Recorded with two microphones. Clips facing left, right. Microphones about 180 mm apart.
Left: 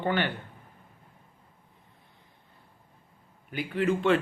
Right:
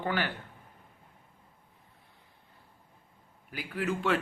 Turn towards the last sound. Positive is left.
turn(degrees=-5)  # may be behind; listen again after turning